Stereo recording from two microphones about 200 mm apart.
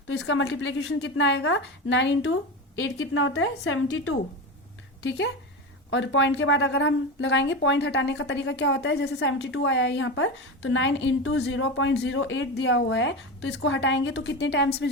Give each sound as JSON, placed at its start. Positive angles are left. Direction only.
{"t": 0.1, "sound": "a woman's voice", "side_deg": 90}
{"t": 5.0, "sound": "a woman's voice", "side_deg": 65}